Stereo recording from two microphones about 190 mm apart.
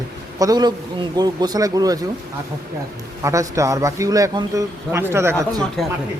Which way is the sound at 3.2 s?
15° right (ahead or behind).